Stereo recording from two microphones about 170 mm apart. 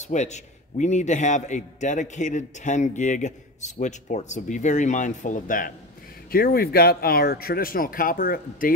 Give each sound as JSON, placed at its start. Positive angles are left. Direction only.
{"t": 0.0, "sound": "a man's voice", "side_deg": 40}
{"t": 6.3, "sound": "speech", "side_deg": 65}